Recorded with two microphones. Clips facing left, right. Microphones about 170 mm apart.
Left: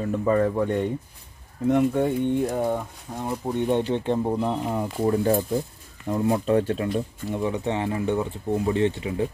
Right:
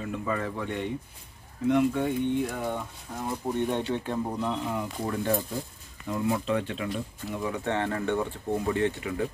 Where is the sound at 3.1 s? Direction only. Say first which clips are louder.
Left 3 dB; 20° left (ahead or behind); by 7.3 s 40° left (ahead or behind).